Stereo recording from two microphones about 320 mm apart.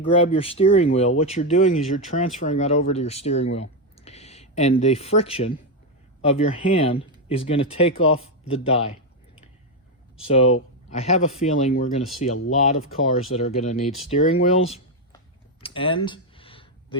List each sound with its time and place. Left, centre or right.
0.3 s speech: centre
10.2 s speech: centre
13.3 s speech: centre
15.6 s a sound: centre